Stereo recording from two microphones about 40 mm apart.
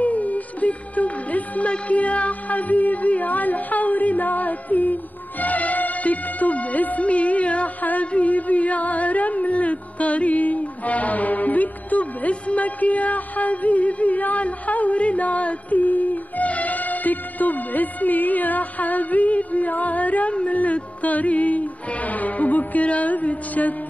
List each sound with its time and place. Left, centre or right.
0.0 s music: left
5.4 s speech: left
8.1 s music: left